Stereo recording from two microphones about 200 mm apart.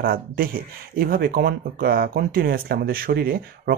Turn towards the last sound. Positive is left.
turn(degrees=-50)  # may be behind; listen again after turning